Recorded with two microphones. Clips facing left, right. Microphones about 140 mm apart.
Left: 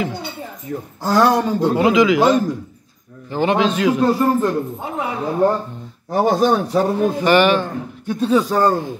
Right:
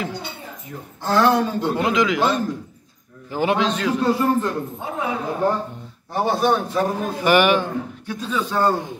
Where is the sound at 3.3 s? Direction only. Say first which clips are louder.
Left 2 dB; 10° right (ahead or behind).